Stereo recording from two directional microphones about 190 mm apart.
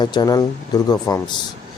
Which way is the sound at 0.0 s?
20° left (ahead or behind).